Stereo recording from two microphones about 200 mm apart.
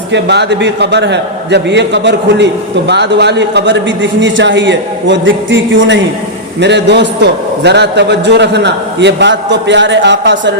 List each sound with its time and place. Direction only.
0.1 s a man's voice: 60° right (ahead or behind)